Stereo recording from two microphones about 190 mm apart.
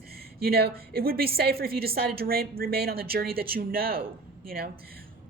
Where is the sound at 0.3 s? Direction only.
55° right (ahead or behind).